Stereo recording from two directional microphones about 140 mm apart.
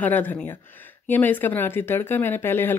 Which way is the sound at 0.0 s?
10° left (ahead or behind).